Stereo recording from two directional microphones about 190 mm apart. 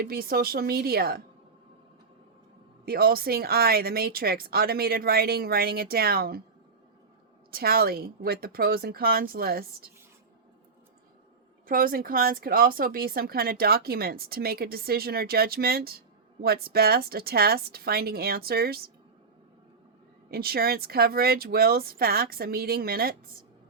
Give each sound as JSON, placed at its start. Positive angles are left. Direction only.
{"t": 0.0, "sound": "speech", "side_deg": -50}
{"t": 2.8, "sound": "speech", "side_deg": -50}
{"t": 7.5, "sound": "speech", "side_deg": -55}
{"t": 11.6, "sound": "speech", "side_deg": -50}
{"t": 20.3, "sound": "speech", "side_deg": -55}